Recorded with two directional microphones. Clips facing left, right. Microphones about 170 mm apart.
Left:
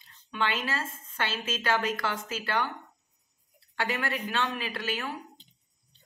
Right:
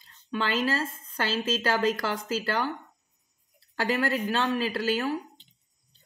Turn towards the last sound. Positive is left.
turn(degrees=-35)  # may be behind; listen again after turning